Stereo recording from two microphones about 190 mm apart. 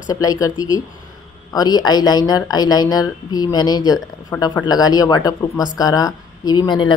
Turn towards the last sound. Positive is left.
turn(degrees=25)  # may be behind; listen again after turning